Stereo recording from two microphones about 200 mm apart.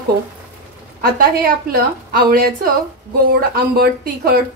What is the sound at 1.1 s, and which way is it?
A woman's voice, 50° right (ahead or behind).